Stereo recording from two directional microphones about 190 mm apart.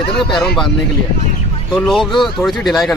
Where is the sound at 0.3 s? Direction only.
Centre (ahead or behind).